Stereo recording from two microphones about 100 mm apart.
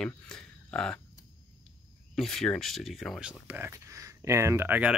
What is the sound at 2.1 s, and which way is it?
Speech, 5° left (ahead or behind).